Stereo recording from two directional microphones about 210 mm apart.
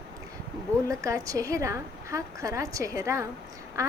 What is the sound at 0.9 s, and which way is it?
A woman's voice, 15° right (ahead or behind).